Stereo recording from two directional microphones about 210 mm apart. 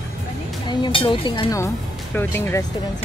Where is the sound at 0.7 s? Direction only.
25° left (ahead or behind).